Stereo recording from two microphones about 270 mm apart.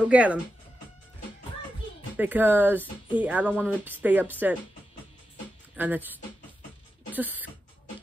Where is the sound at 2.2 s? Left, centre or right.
Centre.